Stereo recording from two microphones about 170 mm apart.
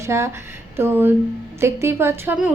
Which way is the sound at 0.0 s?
15° right (ahead or behind).